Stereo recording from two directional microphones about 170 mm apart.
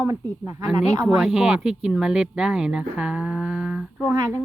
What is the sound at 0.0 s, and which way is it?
Speech, 15° right (ahead or behind).